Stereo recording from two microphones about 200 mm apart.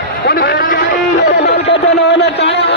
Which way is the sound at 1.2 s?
55° left (ahead or behind).